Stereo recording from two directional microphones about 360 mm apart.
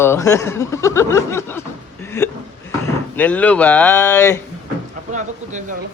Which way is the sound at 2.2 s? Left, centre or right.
Centre.